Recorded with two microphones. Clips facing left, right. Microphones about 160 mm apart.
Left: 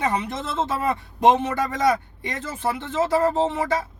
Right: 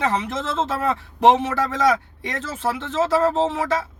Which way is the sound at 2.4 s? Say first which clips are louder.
Right 1 dB; 90° right.